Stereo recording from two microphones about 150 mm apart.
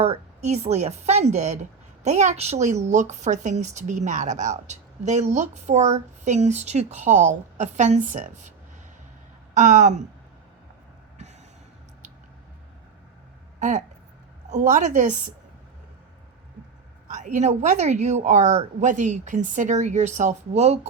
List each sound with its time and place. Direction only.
0.0 s a woman's voice: 45° right (ahead or behind)
9.6 s a woman's voice: 55° right (ahead or behind)
13.6 s a woman's voice: 55° right (ahead or behind)
17.1 s a woman's voice: 50° right (ahead or behind)